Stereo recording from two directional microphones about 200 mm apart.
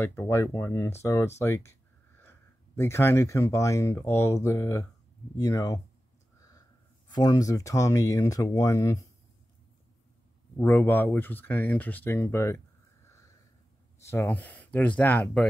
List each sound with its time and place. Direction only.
0.0 s speech: 10° left (ahead or behind)
7.1 s speech: 20° left (ahead or behind)
10.5 s speech: 10° left (ahead or behind)
14.0 s speech: 10° left (ahead or behind)